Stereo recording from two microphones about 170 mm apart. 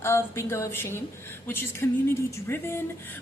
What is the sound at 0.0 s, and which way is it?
A woman's voice, 15° left (ahead or behind).